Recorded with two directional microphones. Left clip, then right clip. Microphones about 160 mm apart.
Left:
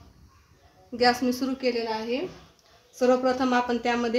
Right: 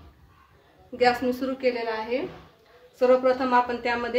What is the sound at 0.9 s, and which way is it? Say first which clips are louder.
Speech: right 1 dB; 60° left (ahead or behind).